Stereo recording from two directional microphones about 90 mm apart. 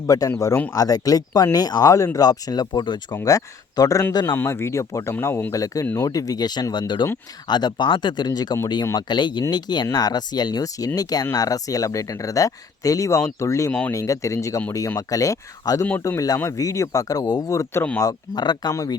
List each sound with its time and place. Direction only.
0.1 s speech: 40° left (ahead or behind); by 3.2 s 55° left (ahead or behind)
3.2 s speech: 40° left (ahead or behind)
4.3 s speech: 25° left (ahead or behind)
5.8 s speech: 25° left (ahead or behind)
6.1 s speech: 40° left (ahead or behind)
13.7 s speech: 15° left (ahead or behind)
13.9 s speech: 35° left (ahead or behind)
17.5 s speech: 35° left (ahead or behind)
18.3 s speech: 50° left (ahead or behind)